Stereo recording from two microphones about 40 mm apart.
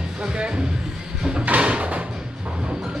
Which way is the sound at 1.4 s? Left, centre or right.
Right.